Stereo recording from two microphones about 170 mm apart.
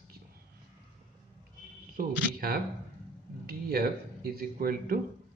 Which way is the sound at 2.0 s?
55° right (ahead or behind).